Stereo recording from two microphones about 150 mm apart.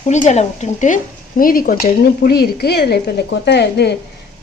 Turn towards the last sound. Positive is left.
turn(degrees=90)